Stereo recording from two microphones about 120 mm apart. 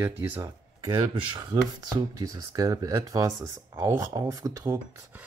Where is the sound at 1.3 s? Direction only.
35° right (ahead or behind).